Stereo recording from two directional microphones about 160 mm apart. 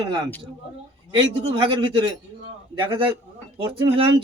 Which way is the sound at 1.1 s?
30° right (ahead or behind).